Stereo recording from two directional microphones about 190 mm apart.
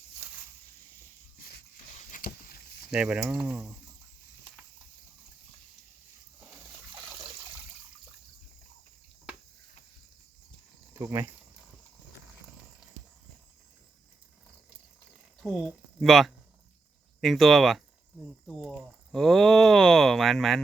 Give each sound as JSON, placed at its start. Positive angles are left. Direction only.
{"t": 2.1, "sound": "a sound", "side_deg": 50}
{"t": 2.9, "sound": "speech", "side_deg": -5}
{"t": 10.9, "sound": "speech", "side_deg": -15}
{"t": 15.4, "sound": "speech", "side_deg": 0}